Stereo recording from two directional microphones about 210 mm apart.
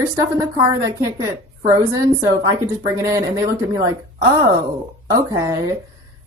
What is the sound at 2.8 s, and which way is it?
Speech, 15° right (ahead or behind).